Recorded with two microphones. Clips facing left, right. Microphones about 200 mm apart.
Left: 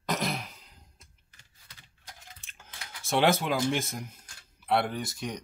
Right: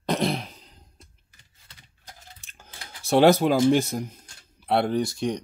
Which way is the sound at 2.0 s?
40° right (ahead or behind).